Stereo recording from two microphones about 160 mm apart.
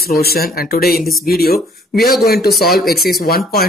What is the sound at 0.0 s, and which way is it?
Speech, 75° left (ahead or behind).